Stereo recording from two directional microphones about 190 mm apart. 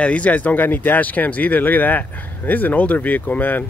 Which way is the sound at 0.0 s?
5° left (ahead or behind).